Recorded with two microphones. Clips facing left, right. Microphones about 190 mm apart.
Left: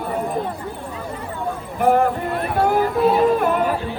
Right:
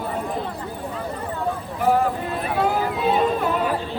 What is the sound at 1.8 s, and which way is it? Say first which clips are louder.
Speech: left 4 dB; 55° left (ahead or behind).